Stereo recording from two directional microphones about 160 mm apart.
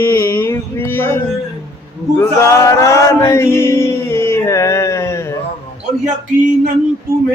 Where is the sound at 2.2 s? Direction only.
20° left (ahead or behind).